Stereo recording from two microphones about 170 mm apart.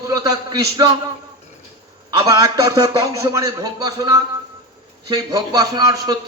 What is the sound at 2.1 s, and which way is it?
A man's voice, 20° right (ahead or behind).